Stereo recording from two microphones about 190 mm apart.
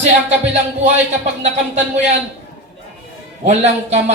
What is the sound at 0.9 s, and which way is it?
Speech, 35° right (ahead or behind).